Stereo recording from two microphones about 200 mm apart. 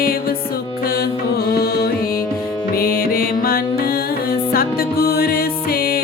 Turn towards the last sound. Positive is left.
turn(degrees=50)  # may be behind; listen again after turning